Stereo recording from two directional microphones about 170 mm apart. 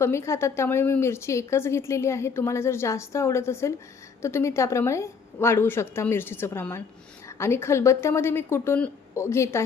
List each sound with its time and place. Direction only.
0.0 s a woman's voice: 15° left (ahead or behind)